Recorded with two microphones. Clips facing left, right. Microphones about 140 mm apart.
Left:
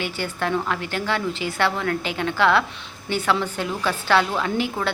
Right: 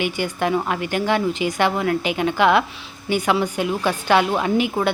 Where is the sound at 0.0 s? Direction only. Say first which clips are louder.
Right 4 dB; 15° right (ahead or behind).